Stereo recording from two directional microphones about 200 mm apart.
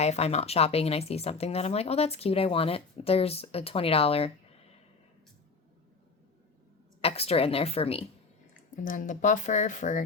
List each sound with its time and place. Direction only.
0.0 s speech: 35° left (ahead or behind)
7.0 s a woman's voice: 30° left (ahead or behind)
8.7 s speech: 40° left (ahead or behind)